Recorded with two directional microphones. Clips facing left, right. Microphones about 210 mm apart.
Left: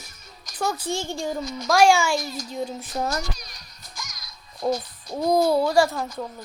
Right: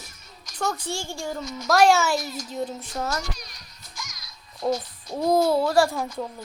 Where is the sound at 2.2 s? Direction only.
35° left (ahead or behind).